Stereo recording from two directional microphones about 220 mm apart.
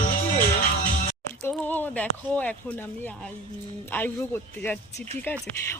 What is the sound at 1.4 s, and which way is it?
Speech, 5° left (ahead or behind).